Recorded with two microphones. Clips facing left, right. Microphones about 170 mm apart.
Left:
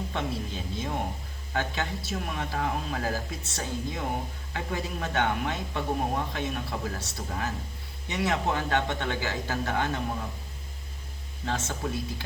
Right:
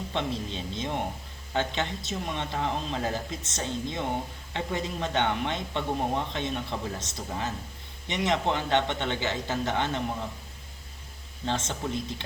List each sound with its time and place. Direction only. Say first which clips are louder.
0.1 s speech: right 1 dB; 20° right (ahead or behind)
11.4 s speech: right 1 dB; 25° right (ahead or behind)